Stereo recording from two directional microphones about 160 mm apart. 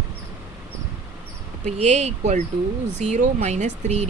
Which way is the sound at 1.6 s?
45° right (ahead or behind).